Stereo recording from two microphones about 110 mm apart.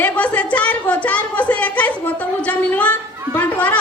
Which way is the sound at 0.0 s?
15° left (ahead or behind).